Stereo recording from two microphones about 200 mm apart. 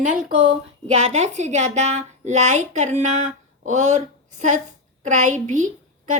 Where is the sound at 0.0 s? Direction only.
40° right (ahead or behind).